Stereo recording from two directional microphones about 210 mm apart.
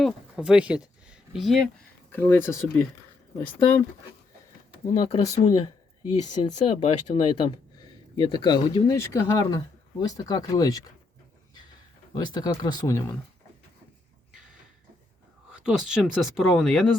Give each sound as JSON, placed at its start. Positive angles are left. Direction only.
{"t": 0.0, "sound": "speech", "side_deg": -5}
{"t": 1.0, "sound": "a sound", "side_deg": -5}
{"t": 2.1, "sound": "speech", "side_deg": 10}
{"t": 4.9, "sound": "speech", "side_deg": 20}
{"t": 5.5, "sound": "a sound", "side_deg": 20}
{"t": 6.4, "sound": "speech", "side_deg": 25}
{"t": 12.1, "sound": "speech", "side_deg": 20}
{"t": 15.6, "sound": "speech", "side_deg": -5}